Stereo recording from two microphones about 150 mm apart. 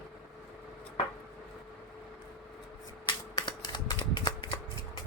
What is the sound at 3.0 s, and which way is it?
Cap gun, 30° left (ahead or behind).